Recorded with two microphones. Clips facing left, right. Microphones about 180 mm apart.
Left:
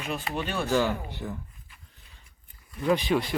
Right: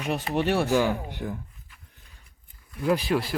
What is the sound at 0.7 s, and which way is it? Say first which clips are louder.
Speech: right 2 dB; 10° right (ahead or behind).